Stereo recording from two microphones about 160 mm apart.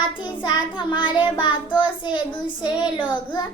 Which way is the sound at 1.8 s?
30° left (ahead or behind).